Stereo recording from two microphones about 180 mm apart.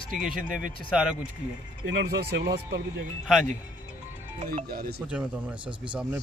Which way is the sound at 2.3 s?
65° right (ahead or behind).